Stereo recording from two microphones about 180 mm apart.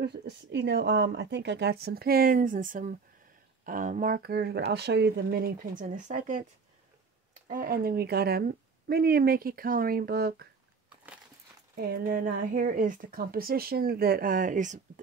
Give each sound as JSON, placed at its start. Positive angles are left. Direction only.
{"t": 0.0, "sound": "speech", "side_deg": -70}
{"t": 7.4, "sound": "speech", "side_deg": -50}
{"t": 11.7, "sound": "speech", "side_deg": -50}